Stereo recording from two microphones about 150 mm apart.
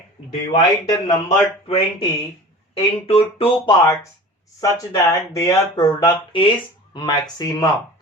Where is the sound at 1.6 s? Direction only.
40° left (ahead or behind).